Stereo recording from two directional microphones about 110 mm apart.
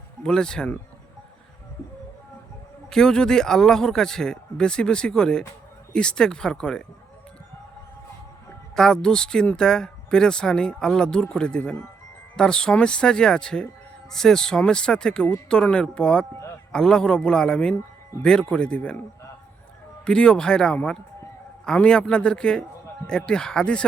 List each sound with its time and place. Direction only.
0.2 s speech: 5° left (ahead or behind)
2.9 s speech: 5° left (ahead or behind)
8.7 s speech: 5° left (ahead or behind)
20.1 s speech: 10° left (ahead or behind)